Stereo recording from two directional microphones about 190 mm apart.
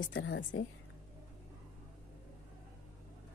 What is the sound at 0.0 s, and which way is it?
Speech, 75° left (ahead or behind).